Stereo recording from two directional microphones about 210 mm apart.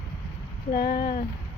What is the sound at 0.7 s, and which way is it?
Speech, 45° left (ahead or behind).